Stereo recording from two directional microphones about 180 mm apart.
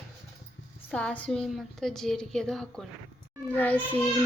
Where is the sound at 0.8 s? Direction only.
5° left (ahead or behind).